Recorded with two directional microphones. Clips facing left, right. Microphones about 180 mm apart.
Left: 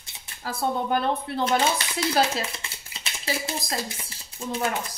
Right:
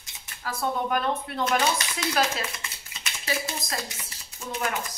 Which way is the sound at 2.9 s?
30° left (ahead or behind).